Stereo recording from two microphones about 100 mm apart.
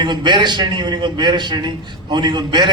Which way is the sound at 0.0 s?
50° right (ahead or behind).